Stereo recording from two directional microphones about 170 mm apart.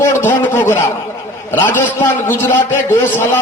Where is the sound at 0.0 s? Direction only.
15° left (ahead or behind).